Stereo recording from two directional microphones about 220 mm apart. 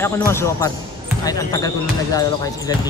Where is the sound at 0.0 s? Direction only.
10° left (ahead or behind).